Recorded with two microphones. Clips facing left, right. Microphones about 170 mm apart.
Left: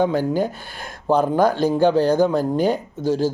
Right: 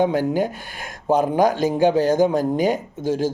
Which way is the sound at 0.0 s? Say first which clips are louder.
Even; 15° right (ahead or behind).